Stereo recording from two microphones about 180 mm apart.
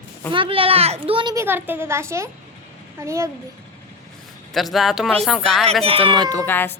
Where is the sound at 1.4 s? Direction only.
10° right (ahead or behind).